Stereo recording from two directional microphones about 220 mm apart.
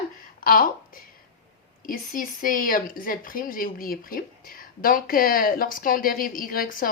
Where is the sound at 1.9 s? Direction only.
40° left (ahead or behind).